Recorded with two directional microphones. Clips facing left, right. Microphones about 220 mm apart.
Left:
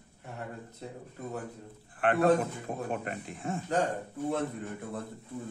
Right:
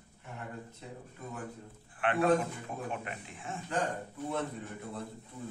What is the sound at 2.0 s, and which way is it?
Speech, 40° left (ahead or behind).